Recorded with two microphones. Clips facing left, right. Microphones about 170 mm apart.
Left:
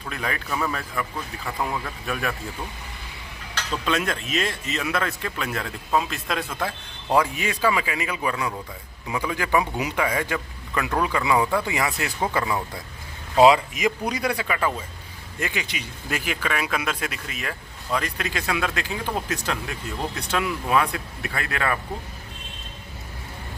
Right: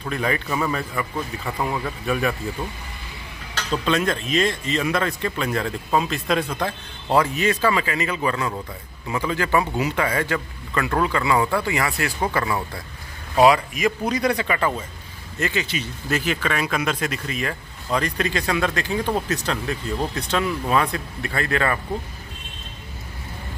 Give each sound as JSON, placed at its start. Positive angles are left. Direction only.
{"t": 0.1, "sound": "speech", "side_deg": 0}
{"t": 3.8, "sound": "speech", "side_deg": 5}